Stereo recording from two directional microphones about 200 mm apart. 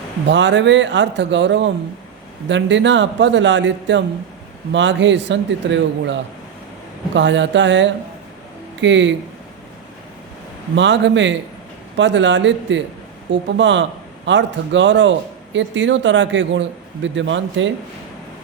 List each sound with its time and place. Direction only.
0.3 s a man's voice: 65° right (ahead or behind)
10.8 s a man's voice: 65° right (ahead or behind)